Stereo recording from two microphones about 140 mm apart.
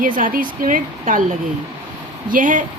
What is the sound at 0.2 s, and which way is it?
A woman's voice, 80° right.